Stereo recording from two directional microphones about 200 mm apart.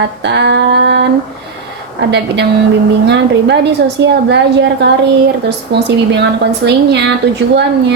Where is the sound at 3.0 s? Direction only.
60° right (ahead or behind).